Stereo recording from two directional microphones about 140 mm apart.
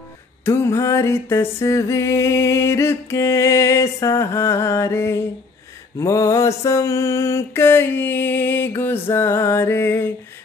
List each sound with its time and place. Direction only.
0.5 s music: 20° left (ahead or behind)
5.9 s mantra: 20° left (ahead or behind)